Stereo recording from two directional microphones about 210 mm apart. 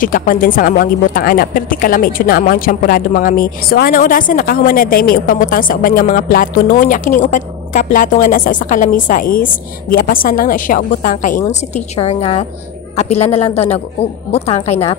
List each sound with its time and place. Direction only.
0.0 s a woman's voice: 40° left (ahead or behind)
11.7 s speech: 30° left (ahead or behind)